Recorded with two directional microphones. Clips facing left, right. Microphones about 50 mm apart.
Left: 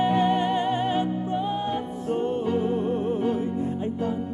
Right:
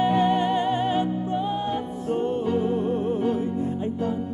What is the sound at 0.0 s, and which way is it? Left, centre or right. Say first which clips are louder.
Music: right 1 dB; centre.